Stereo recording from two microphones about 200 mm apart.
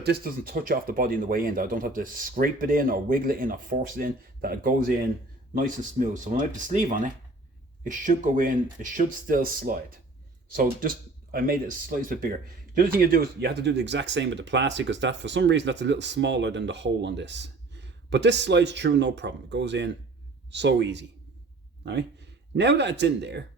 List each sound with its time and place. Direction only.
0.0 s speech: 50° right (ahead or behind)
22.5 s speech: 60° right (ahead or behind)